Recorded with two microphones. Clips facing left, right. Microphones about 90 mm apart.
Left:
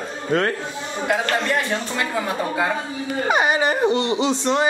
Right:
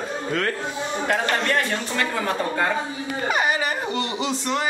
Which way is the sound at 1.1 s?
15° left (ahead or behind).